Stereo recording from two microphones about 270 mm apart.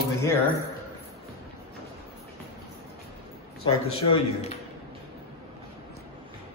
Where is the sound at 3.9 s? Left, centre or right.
Left.